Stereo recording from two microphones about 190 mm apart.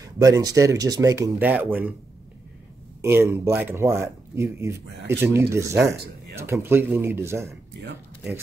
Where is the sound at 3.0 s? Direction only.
15° right (ahead or behind).